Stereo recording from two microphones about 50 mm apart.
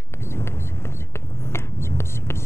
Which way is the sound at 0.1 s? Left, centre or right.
Left.